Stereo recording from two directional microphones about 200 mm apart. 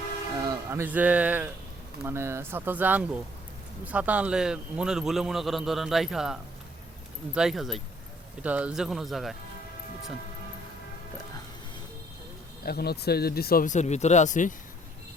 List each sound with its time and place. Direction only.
0.4 s a man's voice: 10° right (ahead or behind)
12.6 s speech: 50° left (ahead or behind)